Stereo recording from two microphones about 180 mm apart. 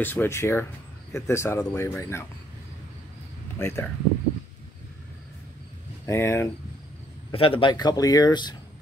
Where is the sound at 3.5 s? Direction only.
15° left (ahead or behind).